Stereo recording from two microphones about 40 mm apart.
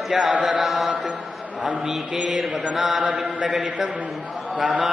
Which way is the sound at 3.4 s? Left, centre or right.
Right.